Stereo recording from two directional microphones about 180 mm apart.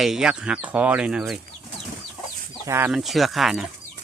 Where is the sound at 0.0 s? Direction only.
5° right (ahead or behind).